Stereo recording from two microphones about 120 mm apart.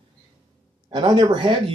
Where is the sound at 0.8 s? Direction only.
40° right (ahead or behind).